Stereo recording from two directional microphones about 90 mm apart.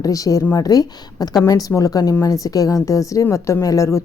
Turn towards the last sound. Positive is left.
turn(degrees=35)  # may be behind; listen again after turning